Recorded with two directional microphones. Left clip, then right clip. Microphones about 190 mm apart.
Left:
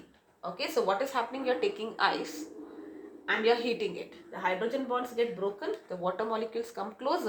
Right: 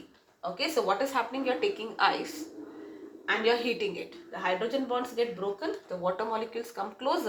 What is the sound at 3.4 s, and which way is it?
Speech, 45° left (ahead or behind).